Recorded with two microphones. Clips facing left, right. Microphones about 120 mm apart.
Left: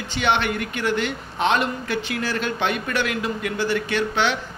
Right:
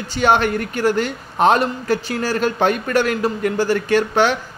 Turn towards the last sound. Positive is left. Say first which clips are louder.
# right 6 dB
turn(degrees=-45)  # may be behind; listen again after turning